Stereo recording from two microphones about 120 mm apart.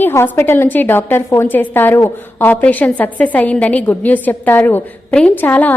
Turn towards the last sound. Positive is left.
turn(degrees=15)  # may be behind; listen again after turning